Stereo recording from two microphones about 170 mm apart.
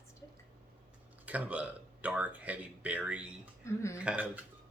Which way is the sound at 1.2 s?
10° right (ahead or behind).